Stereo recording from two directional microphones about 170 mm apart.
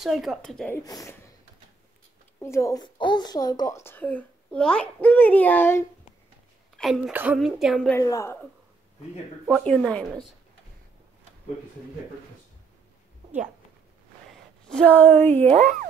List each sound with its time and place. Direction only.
0.0 s a woman's voice: centre (ahead or behind)
0.7 s speech: 20° left (ahead or behind)
2.4 s a child's voice: 15° left (ahead or behind)
6.8 s a woman's voice: 5° right (ahead or behind)
7.9 s a child's voice: 20° left (ahead or behind)
9.5 s a woman's voice: 5° left (ahead or behind)
14.7 s a child's voice: 5° left (ahead or behind)